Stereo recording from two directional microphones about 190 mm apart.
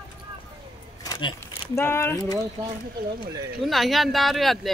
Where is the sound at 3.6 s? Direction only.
Centre (ahead or behind).